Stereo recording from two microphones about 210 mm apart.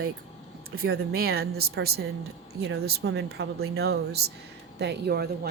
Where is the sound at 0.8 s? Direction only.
45° right (ahead or behind).